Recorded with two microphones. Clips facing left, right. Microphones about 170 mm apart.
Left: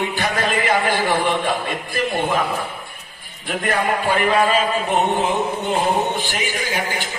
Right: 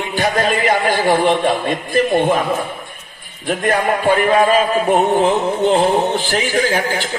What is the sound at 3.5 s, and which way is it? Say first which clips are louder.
A man's voice: right 4 dB; 45° right (ahead or behind).